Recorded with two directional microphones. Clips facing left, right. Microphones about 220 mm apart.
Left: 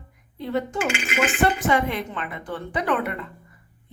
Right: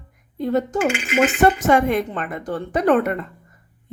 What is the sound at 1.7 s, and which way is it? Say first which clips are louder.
A woman's voice: right 6 dB; 50° right (ahead or behind).